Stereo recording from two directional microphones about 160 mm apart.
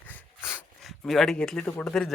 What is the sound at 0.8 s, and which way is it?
Speech, centre (ahead or behind).